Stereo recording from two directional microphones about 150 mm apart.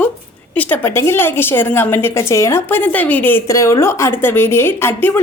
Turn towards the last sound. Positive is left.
turn(degrees=15)  # may be behind; listen again after turning